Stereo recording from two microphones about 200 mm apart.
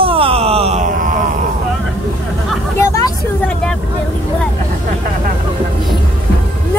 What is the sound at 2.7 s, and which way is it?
Vehicle, 15° left (ahead or behind).